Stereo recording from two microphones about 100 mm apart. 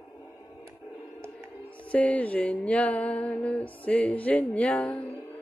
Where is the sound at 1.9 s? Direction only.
15° left (ahead or behind).